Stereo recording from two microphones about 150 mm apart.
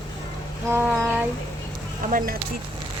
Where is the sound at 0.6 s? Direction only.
15° right (ahead or behind).